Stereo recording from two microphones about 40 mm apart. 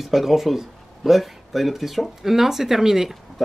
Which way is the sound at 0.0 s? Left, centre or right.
Centre.